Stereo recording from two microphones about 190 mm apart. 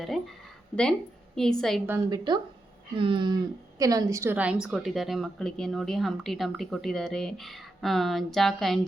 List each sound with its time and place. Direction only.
0.0 s a sound: centre (ahead or behind)
1.4 s a woman's voice: 5° left (ahead or behind)
1.9 s a woman's voice: 20° right (ahead or behind); by 8.8 s centre (ahead or behind)